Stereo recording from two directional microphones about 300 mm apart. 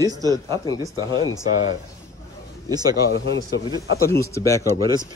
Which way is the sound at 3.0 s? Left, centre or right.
Left.